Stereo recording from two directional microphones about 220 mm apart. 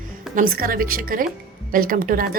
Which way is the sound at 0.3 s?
40° right (ahead or behind).